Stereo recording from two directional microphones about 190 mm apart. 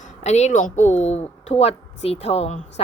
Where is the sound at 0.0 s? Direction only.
35° left (ahead or behind).